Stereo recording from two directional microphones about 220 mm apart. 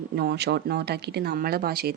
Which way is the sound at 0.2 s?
50° right (ahead or behind).